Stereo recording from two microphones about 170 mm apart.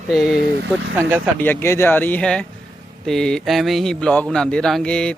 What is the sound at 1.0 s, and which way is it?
Speech, 15° right (ahead or behind).